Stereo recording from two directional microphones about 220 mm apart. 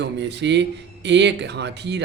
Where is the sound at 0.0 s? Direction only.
50° right (ahead or behind).